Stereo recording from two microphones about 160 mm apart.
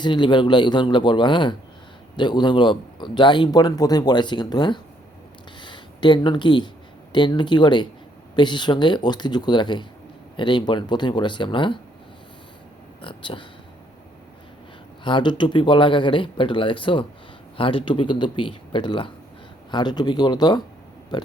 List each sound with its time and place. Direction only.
0.0 s a man's voice: 30° left (ahead or behind)
5.5 s a sound: 30° left (ahead or behind)
7.1 s a man's voice: 30° left (ahead or behind)
13.0 s speech: 30° left (ahead or behind)
15.0 s a man's voice: 30° left (ahead or behind)
21.1 s pig: 25° left (ahead or behind)